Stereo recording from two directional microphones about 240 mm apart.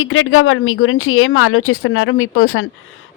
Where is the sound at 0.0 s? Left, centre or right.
Left.